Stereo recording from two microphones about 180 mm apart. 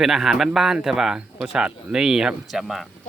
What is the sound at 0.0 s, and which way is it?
A man's voice, centre (ahead or behind).